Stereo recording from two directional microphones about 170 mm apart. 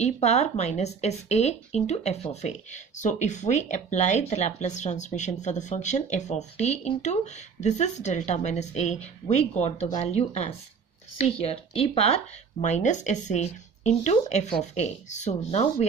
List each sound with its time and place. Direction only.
0.0 s speech: 40° left (ahead or behind)